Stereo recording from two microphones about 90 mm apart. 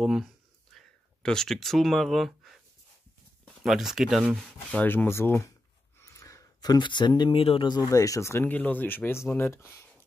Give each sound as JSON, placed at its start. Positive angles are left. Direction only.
{"t": 0.0, "sound": "speech", "side_deg": -5}
{"t": 0.7, "sound": "a sound", "side_deg": 5}
{"t": 3.6, "sound": "speech", "side_deg": -5}
{"t": 4.6, "sound": "speech", "side_deg": 20}
{"t": 5.9, "sound": "a sound", "side_deg": 35}
{"t": 6.8, "sound": "speech", "side_deg": 60}
{"t": 7.3, "sound": "speech", "side_deg": 85}
{"t": 7.7, "sound": "speech", "side_deg": 40}